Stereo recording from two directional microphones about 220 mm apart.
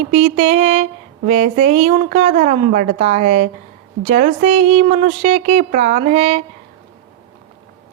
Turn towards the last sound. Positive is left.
turn(degrees=-30)  # may be behind; listen again after turning